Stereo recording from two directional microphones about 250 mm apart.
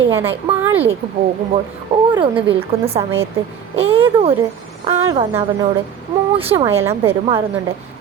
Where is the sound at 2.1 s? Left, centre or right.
Right.